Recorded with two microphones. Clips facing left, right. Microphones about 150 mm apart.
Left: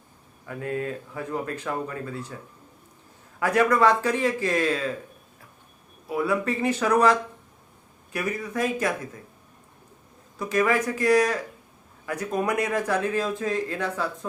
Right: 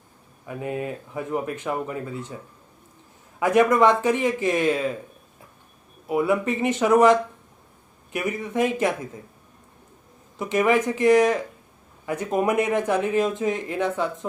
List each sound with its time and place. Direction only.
0.4 s speech: 15° right (ahead or behind)
3.4 s speech: 20° right (ahead or behind)
6.1 s speech: 20° right (ahead or behind)
10.3 s speech: 20° right (ahead or behind)